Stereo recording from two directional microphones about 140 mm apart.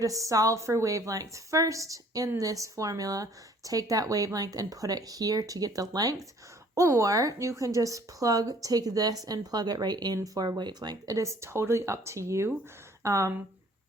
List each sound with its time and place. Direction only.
0.0 s a woman's voice: 25° right (ahead or behind)